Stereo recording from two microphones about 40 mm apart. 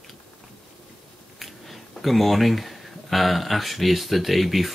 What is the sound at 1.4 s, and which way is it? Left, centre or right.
Speech, centre.